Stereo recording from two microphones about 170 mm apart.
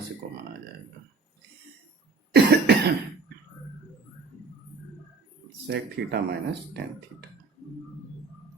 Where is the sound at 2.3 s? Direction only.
80° right.